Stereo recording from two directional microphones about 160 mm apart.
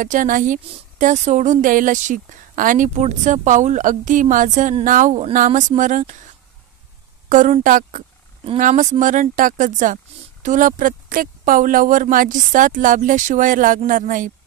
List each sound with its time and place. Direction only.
0.0 s a woman's voice: 55° right (ahead or behind)
7.2 s a woman's voice: 50° right (ahead or behind)